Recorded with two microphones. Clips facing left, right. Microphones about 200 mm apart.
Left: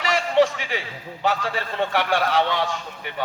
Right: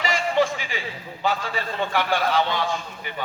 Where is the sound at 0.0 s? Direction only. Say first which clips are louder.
Left 3 dB; 75° left (ahead or behind).